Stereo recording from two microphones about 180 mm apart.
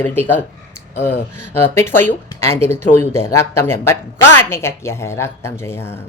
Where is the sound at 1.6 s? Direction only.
15° left (ahead or behind).